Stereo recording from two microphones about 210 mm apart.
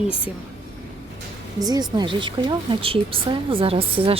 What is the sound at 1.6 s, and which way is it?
A woman's voice, 20° right (ahead or behind).